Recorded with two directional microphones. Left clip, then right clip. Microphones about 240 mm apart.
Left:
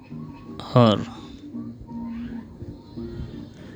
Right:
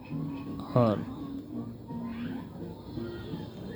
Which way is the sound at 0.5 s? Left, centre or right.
Left.